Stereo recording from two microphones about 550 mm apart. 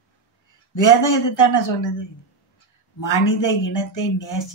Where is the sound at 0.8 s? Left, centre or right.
Left.